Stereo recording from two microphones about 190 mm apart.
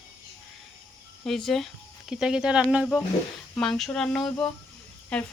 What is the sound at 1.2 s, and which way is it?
Speech, centre (ahead or behind).